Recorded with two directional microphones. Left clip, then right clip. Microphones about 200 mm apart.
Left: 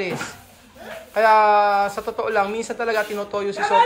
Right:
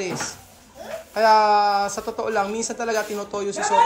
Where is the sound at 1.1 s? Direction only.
20° right (ahead or behind).